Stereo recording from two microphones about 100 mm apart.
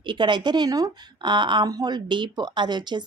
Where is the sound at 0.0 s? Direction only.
50° right (ahead or behind).